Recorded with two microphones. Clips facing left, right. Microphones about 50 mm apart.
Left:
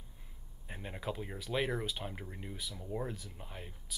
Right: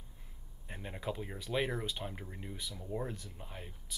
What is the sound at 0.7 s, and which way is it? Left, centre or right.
Speech, centre.